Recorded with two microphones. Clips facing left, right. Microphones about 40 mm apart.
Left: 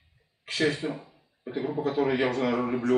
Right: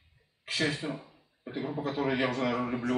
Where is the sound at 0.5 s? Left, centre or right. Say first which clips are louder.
Left 4 dB; centre.